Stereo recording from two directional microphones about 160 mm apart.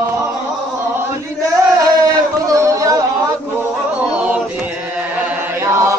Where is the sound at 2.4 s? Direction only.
20° right (ahead or behind).